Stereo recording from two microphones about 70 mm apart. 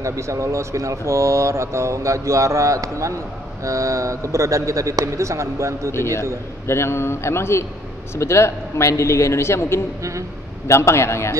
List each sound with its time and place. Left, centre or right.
0.0 s speech: right
5.9 s speech: left